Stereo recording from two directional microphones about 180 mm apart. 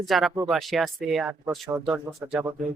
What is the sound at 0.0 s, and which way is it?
A woman's voice, centre (ahead or behind).